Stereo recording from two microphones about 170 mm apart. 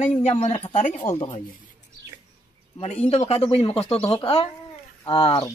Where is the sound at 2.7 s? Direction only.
35° left (ahead or behind).